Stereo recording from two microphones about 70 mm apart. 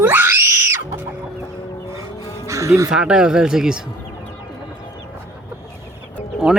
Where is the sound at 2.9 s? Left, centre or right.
Centre.